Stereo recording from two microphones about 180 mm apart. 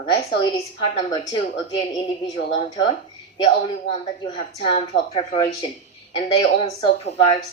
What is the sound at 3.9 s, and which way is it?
Speech, 30° left (ahead or behind).